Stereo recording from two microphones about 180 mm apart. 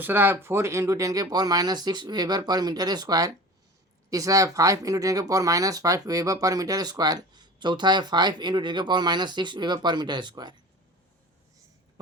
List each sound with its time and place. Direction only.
0.0 s speech: 10° right (ahead or behind)